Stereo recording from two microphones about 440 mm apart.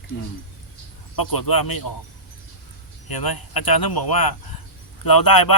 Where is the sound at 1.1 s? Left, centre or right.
Left.